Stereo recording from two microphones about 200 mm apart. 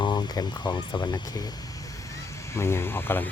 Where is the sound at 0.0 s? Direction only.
20° left (ahead or behind).